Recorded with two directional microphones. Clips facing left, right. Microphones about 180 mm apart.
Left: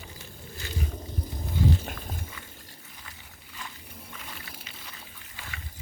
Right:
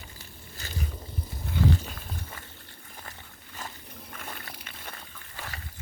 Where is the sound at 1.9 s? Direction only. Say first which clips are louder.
Left 3 dB; 45° left (ahead or behind).